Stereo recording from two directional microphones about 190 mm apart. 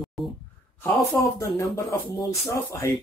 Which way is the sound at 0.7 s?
15° left (ahead or behind).